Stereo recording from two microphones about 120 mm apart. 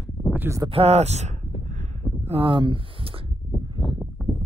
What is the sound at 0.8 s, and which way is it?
Speech, 65° right (ahead or behind).